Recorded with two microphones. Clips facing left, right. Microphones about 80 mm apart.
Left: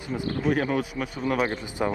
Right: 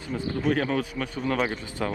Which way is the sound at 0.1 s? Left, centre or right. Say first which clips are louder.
Even; centre.